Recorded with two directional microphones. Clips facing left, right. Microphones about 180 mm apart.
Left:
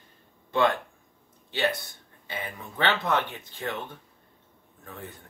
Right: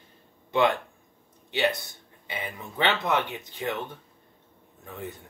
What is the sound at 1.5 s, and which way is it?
Speech, 15° right (ahead or behind).